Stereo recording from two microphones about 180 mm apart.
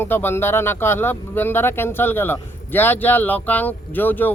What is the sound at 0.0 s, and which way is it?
A man's voice, 10° left (ahead or behind).